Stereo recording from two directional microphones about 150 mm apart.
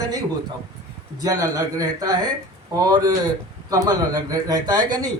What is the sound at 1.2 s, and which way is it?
Speech, 20° right (ahead or behind).